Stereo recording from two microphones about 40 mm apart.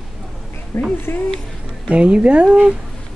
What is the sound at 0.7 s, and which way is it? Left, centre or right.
Speech, left.